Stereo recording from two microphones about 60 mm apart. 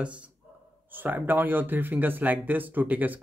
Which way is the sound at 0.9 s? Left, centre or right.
Right.